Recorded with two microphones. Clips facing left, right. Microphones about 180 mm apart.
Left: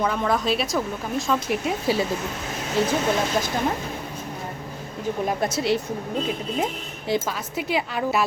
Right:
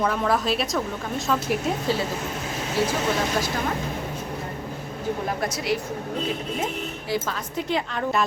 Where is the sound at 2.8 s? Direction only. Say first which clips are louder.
Left 1 dB; 20° left (ahead or behind).